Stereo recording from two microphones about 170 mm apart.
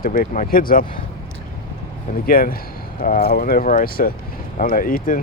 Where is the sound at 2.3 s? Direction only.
55° left (ahead or behind).